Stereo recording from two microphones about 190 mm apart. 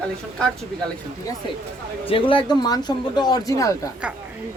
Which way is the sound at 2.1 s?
25° left (ahead or behind).